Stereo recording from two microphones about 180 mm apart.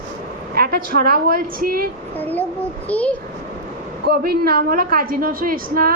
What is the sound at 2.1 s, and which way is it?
A child's voice, 10° left (ahead or behind).